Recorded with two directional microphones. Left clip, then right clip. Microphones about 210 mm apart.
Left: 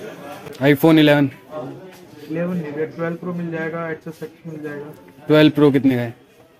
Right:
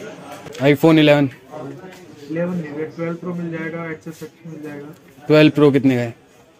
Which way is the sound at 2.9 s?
Centre (ahead or behind).